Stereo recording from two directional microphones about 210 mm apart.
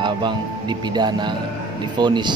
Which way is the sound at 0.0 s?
20° right (ahead or behind).